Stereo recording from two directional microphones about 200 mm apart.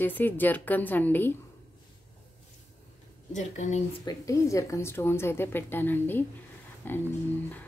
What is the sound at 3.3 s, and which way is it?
Speech, 35° left (ahead or behind).